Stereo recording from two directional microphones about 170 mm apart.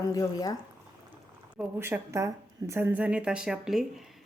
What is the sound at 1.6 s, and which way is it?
A woman's voice, 10° right (ahead or behind).